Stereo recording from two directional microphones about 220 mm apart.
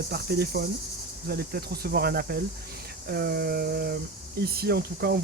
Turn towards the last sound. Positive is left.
turn(degrees=-45)  # may be behind; listen again after turning